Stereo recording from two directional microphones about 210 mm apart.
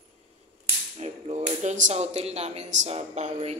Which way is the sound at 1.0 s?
30° right (ahead or behind).